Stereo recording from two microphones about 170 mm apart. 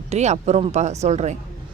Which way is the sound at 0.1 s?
40° right (ahead or behind).